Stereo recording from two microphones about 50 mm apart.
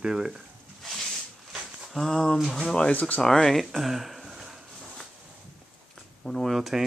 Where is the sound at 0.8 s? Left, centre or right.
Centre.